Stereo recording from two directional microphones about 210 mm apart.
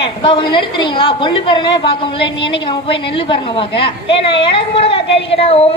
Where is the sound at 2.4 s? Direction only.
25° left (ahead or behind).